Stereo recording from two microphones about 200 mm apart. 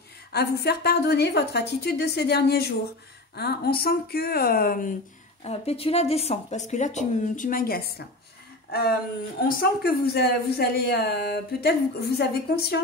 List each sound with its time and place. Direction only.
0.3 s speech: 55° left (ahead or behind)
5.4 s speech: 30° left (ahead or behind); by 7.9 s 50° left (ahead or behind)
9.6 s speech: 50° left (ahead or behind)